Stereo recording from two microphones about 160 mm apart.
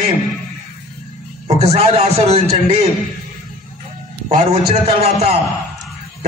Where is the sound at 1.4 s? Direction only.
40° right (ahead or behind).